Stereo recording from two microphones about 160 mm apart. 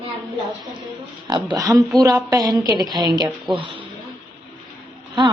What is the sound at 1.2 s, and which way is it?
A woman's voice, 25° right (ahead or behind).